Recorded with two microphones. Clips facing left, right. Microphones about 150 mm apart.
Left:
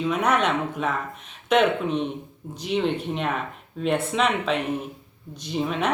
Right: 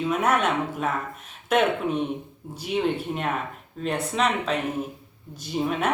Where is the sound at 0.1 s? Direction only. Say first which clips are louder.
Left 1 dB; 5° right (ahead or behind).